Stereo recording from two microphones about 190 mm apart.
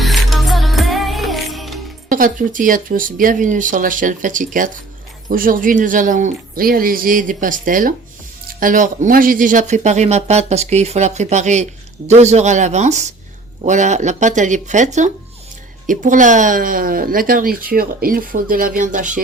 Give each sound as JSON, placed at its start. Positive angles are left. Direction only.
{"t": 0.0, "sound": "music", "side_deg": 0}
{"t": 2.0, "sound": "speech", "side_deg": -45}